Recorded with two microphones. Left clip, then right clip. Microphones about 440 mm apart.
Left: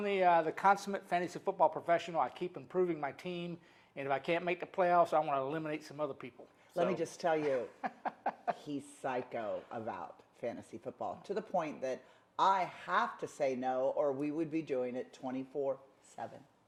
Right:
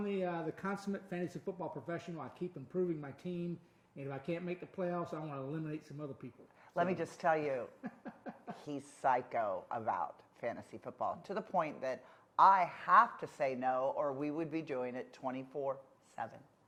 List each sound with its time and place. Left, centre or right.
0.0 s speech: left
6.7 s speech: right
7.8 s snicker: left
8.6 s speech: right